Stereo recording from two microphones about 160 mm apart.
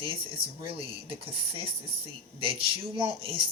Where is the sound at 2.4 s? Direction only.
35° right (ahead or behind).